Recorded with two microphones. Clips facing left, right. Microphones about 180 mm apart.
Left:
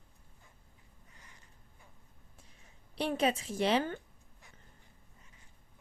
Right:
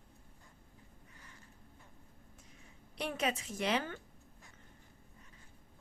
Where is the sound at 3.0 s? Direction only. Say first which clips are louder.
Left 5 dB; 30° left (ahead or behind).